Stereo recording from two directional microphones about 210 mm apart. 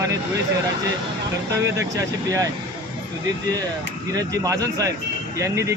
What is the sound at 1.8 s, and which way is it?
Speech, 15° right (ahead or behind).